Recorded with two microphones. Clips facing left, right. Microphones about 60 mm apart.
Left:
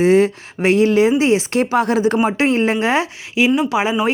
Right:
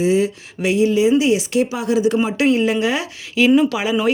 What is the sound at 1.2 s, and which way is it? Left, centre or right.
Speech, left.